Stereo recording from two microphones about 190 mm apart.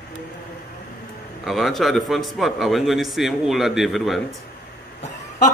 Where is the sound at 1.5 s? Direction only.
Centre (ahead or behind).